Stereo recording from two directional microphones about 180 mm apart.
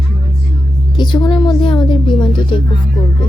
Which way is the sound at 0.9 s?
25° left (ahead or behind).